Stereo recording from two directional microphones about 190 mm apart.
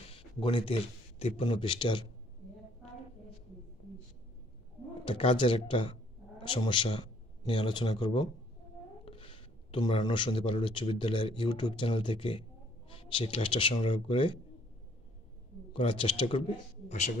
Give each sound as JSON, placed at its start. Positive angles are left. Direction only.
{"t": 0.1, "sound": "a sound", "side_deg": 25}
{"t": 1.2, "sound": "speech", "side_deg": 30}
{"t": 5.0, "sound": "a man's voice", "side_deg": 30}
{"t": 15.7, "sound": "speech", "side_deg": 25}